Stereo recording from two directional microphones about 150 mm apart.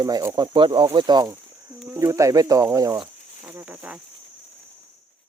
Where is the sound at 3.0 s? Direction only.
10° right (ahead or behind).